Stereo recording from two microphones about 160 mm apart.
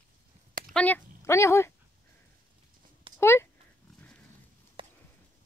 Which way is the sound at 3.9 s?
5° left (ahead or behind).